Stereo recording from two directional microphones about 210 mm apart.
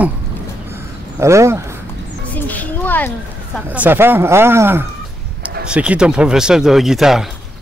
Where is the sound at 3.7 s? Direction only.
10° right (ahead or behind).